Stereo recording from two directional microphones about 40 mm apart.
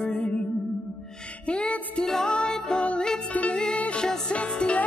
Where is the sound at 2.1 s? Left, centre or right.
Left.